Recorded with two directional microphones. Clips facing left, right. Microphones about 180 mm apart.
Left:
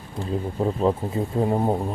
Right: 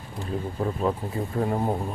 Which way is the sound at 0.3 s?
25° left (ahead or behind).